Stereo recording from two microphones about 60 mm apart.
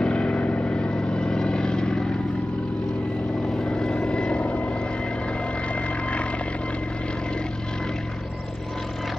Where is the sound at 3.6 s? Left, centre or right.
Centre.